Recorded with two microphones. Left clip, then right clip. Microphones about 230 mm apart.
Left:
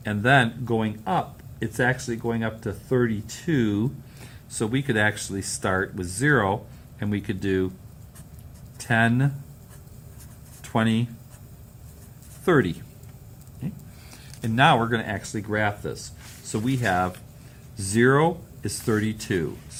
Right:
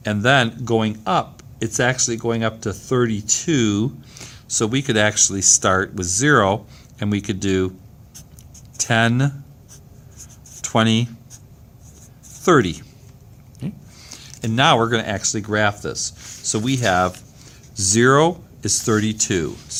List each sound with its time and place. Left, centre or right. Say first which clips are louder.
0.0 s speech: right 4 dB; right
8.8 s speech: right 4 dB; right
10.6 s speech: right 7 dB; right
12.5 s speech: right 6 dB; right
14.1 s speech: right 4 dB; right